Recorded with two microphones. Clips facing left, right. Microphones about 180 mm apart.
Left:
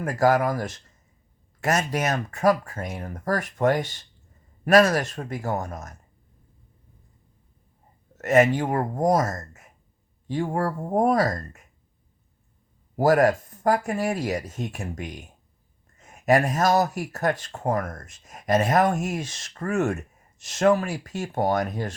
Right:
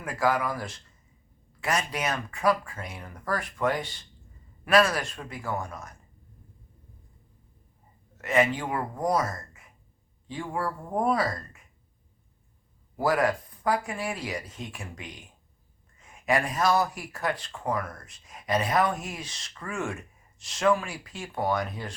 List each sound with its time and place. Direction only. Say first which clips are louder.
0.0 s speech: left 6 dB; 45° left (ahead or behind)
8.2 s speech: left 6 dB; 45° left (ahead or behind)
13.0 s speech: left 6 dB; 45° left (ahead or behind)